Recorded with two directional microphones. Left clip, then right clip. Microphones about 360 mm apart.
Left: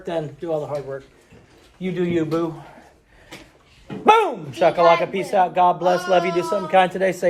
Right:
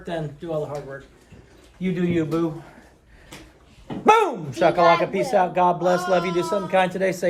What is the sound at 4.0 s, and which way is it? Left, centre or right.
Speech, centre.